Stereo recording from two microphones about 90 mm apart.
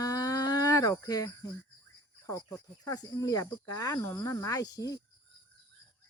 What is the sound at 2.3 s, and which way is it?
Speech, 40° left (ahead or behind).